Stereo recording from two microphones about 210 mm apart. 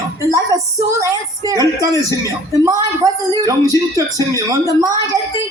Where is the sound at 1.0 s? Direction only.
15° right (ahead or behind).